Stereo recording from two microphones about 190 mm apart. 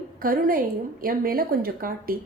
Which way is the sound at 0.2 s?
50° right (ahead or behind).